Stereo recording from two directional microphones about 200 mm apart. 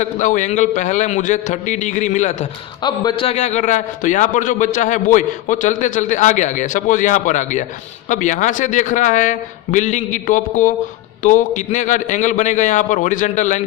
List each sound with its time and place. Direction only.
0.0 s a man's voice: 40° left (ahead or behind)
2.8 s a man's voice: 20° left (ahead or behind); by 13.6 s 35° left (ahead or behind)